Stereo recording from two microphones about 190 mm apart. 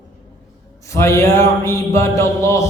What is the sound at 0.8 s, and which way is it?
A man's voice, 15° left (ahead or behind).